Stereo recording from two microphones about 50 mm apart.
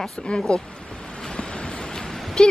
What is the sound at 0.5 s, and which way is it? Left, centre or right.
Ocean, centre.